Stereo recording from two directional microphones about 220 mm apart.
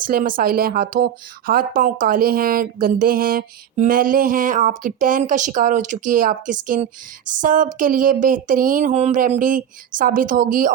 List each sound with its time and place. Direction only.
0.0 s speech: 40° right (ahead or behind)